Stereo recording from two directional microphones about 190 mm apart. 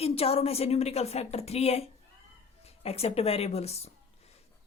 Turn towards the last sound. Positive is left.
turn(degrees=35)  # may be behind; listen again after turning